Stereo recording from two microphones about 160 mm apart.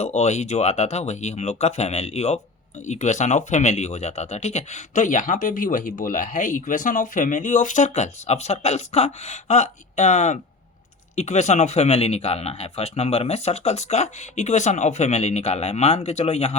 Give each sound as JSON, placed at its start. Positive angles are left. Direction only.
{"t": 0.0, "sound": "speech", "side_deg": 45}